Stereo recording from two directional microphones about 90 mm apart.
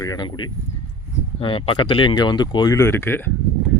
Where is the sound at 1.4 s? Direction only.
80° left; by 2.7 s 55° left (ahead or behind).